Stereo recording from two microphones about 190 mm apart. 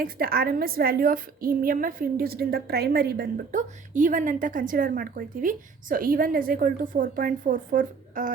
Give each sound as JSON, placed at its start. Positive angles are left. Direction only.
{"t": 0.0, "sound": "a woman's voice", "side_deg": -50}